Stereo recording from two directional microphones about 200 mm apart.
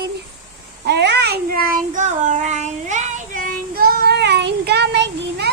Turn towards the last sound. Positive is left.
turn(degrees=-55)  # may be behind; listen again after turning